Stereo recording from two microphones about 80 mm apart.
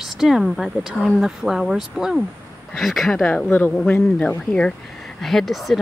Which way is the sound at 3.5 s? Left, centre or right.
Left.